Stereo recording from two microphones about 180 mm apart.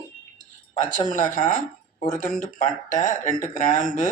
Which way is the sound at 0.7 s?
45° left (ahead or behind).